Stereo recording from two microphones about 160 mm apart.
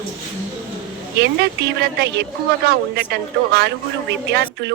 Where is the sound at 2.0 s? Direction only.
90° right.